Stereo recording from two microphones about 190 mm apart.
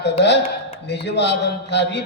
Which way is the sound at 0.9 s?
65° left (ahead or behind).